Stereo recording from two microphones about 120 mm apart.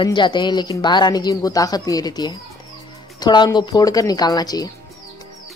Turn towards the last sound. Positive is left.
turn(degrees=35)  # may be behind; listen again after turning